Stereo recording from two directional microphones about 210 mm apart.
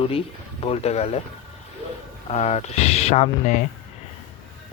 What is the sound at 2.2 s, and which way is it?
Speech, 30° left (ahead or behind).